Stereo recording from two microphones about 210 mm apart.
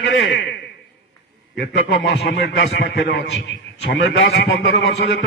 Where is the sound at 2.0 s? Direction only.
50° left (ahead or behind).